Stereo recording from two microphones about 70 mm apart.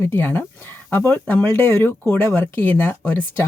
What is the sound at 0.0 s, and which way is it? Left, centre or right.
Speech, left.